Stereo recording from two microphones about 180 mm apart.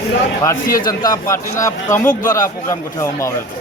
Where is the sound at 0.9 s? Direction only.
20° left (ahead or behind).